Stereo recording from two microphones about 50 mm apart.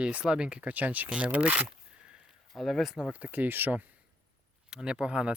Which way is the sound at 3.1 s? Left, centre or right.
Right.